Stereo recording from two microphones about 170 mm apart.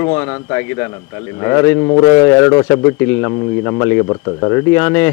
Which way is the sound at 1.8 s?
25° left (ahead or behind).